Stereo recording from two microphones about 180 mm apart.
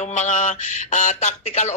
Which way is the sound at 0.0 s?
45° left (ahead or behind).